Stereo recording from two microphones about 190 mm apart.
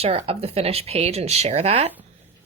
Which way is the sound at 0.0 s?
30° right (ahead or behind).